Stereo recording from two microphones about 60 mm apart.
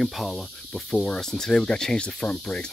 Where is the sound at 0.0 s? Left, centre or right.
Centre.